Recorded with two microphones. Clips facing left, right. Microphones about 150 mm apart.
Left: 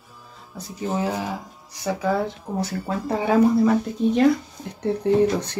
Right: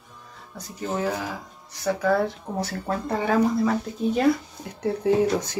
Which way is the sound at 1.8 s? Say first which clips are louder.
Right 1 dB; 10° left (ahead or behind).